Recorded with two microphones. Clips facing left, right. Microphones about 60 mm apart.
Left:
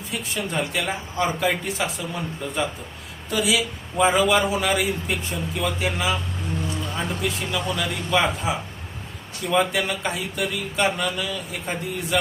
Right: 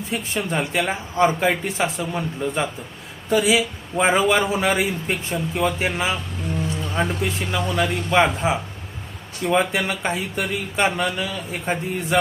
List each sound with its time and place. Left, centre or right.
0.1 s a man's voice: right